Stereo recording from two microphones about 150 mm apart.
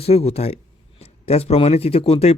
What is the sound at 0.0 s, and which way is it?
A man's voice, 45° left (ahead or behind).